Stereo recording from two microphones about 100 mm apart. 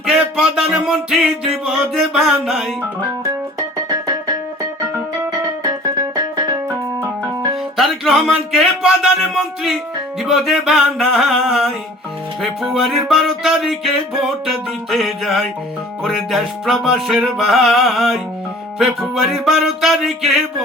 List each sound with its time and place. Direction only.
0.0 s music: 5° right (ahead or behind)
6.7 s keyboard: 30° right (ahead or behind)
7.8 s a sound: centre (ahead or behind)
10.2 s music: 5° right (ahead or behind)